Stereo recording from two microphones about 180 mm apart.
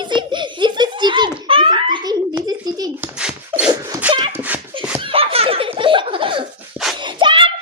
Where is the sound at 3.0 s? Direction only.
5° right (ahead or behind).